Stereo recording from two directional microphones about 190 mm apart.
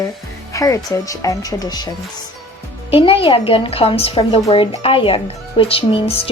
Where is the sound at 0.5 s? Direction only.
15° left (ahead or behind).